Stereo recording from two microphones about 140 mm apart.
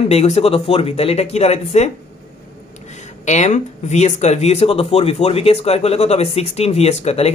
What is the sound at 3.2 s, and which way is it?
Speech, 55° left (ahead or behind).